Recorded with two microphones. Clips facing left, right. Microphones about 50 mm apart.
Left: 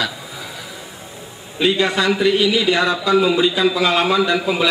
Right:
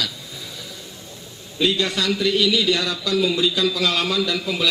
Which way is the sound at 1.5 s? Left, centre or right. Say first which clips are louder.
Left 4 dB; left.